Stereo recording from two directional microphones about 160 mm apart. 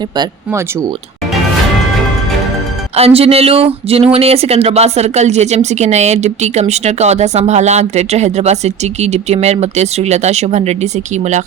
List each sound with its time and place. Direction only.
0.2 s speech: 20° right (ahead or behind)
2.9 s speech: 40° right (ahead or behind)